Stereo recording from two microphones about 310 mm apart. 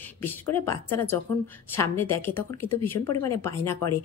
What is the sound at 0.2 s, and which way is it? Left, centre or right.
Speech, centre.